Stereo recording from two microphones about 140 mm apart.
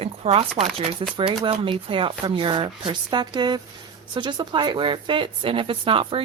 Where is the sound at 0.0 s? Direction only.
45° right (ahead or behind).